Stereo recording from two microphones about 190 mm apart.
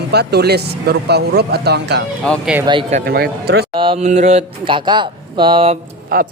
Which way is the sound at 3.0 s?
55° right (ahead or behind).